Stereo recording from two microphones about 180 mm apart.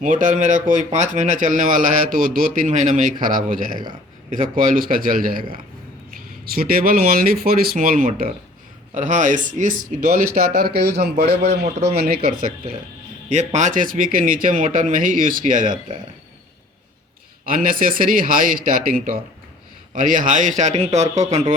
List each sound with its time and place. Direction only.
0.0 s a man's voice: 45° right (ahead or behind)
13.3 s a man's voice: 40° right (ahead or behind)
17.4 s a man's voice: 50° right (ahead or behind)